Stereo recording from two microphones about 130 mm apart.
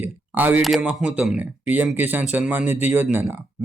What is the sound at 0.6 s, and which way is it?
Speech, centre (ahead or behind).